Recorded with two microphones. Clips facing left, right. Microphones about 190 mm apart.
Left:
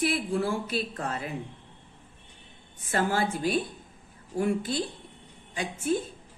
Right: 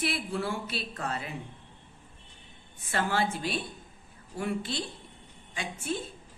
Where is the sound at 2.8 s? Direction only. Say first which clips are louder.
Left 2 dB; 40° left (ahead or behind).